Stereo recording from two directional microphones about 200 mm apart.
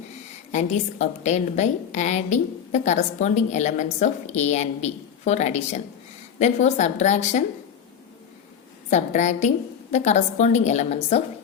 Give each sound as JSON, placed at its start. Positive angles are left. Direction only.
{"t": 0.5, "sound": "a woman's voice", "side_deg": 35}
{"t": 8.9, "sound": "a woman's voice", "side_deg": 35}